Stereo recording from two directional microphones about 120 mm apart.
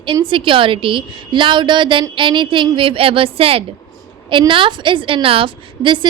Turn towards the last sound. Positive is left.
turn(degrees=-40)  # may be behind; listen again after turning